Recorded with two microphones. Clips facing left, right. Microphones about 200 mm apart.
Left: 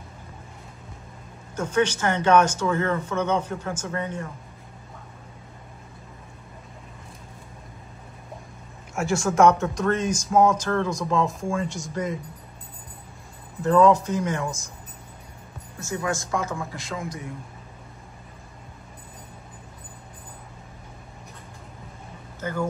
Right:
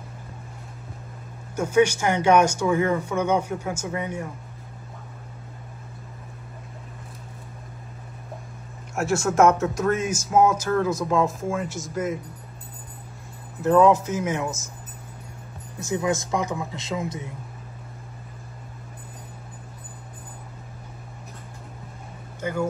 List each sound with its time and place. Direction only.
1.6 s speech: 10° right (ahead or behind)
8.9 s speech: centre (ahead or behind)
13.6 s speech: 5° right (ahead or behind)
15.8 s speech: 20° right (ahead or behind)
22.4 s speech: 10° right (ahead or behind)